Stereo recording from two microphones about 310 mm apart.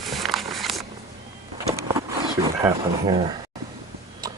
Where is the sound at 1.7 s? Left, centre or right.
Centre.